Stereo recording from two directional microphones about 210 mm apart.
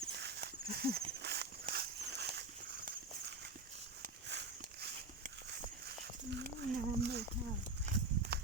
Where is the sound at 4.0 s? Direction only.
55° right (ahead or behind).